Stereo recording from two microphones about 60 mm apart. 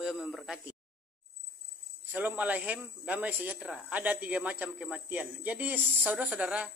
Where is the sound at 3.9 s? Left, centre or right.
Right.